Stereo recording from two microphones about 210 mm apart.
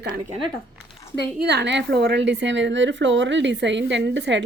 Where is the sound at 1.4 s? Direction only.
55° right (ahead or behind).